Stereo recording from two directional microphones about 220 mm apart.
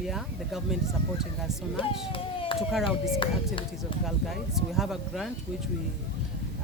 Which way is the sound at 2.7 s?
Centre (ahead or behind).